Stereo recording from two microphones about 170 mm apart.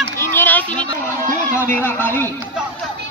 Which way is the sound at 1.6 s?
15° left (ahead or behind).